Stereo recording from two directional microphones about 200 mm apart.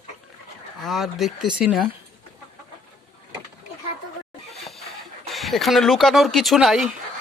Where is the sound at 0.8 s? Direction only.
Centre (ahead or behind).